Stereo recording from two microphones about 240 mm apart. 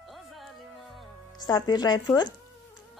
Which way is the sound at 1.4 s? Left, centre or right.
Centre.